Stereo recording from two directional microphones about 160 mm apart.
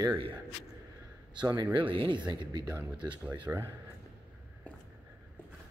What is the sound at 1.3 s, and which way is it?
Speech, 30° right (ahead or behind).